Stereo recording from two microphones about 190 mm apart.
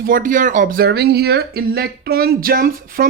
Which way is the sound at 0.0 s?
45° right (ahead or behind).